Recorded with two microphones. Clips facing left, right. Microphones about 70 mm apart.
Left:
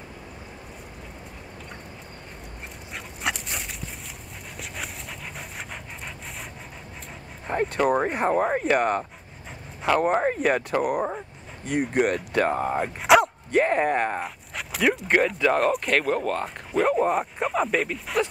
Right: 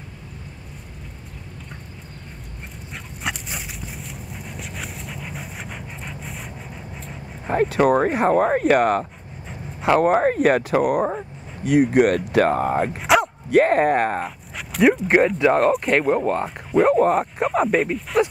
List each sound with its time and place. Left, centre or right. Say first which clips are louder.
2.9 s dog: even; centre
7.4 s speech: right 5 dB; centre
16.0 s speech: right 5 dB; centre
16.4 s speech: right 7 dB; centre